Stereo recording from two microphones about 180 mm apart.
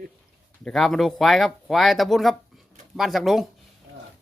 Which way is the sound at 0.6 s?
Centre (ahead or behind).